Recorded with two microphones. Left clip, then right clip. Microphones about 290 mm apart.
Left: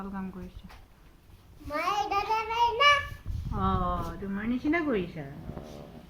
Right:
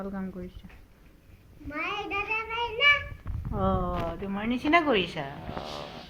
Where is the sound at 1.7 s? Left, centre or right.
Left.